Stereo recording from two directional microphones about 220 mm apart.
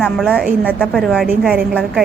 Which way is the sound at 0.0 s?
Centre (ahead or behind).